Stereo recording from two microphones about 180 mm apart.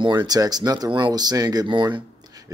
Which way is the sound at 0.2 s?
20° right (ahead or behind).